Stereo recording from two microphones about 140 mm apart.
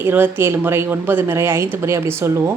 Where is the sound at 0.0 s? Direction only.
15° right (ahead or behind).